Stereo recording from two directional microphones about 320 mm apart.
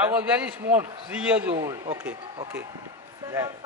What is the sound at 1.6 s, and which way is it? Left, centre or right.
Speech, centre.